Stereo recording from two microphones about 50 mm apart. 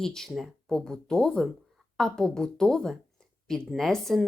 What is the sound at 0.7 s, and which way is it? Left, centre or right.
Speech, centre.